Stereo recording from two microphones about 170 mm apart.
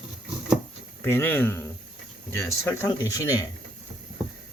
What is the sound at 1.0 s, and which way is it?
Speech, 15° left (ahead or behind).